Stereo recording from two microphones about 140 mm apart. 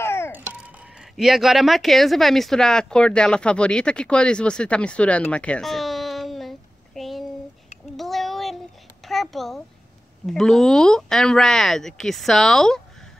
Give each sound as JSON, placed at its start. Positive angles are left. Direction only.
{"t": 0.0, "sound": "babbling", "side_deg": 15}
{"t": 0.3, "sound": "babbling", "side_deg": -15}
{"t": 1.1, "sound": "speech", "side_deg": 0}
{"t": 5.3, "sound": "a sound", "side_deg": 10}
{"t": 7.9, "sound": "child singing", "side_deg": 0}
{"t": 9.0, "sound": "a sound", "side_deg": 0}
{"t": 10.2, "sound": "speech", "side_deg": 5}